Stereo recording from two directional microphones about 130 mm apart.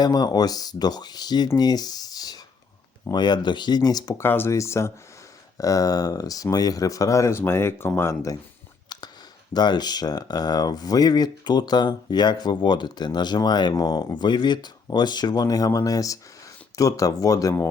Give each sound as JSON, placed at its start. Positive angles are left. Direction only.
{"t": 0.0, "sound": "speech", "side_deg": 30}
{"t": 4.2, "sound": "speech", "side_deg": 15}
{"t": 9.5, "sound": "speech", "side_deg": 35}